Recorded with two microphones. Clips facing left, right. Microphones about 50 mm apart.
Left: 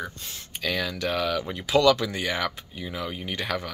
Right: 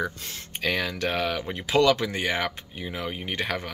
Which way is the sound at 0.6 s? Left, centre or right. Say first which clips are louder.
Right 1 dB; right.